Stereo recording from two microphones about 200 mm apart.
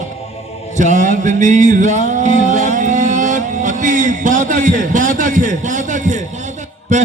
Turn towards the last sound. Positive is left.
turn(degrees=-35)  # may be behind; listen again after turning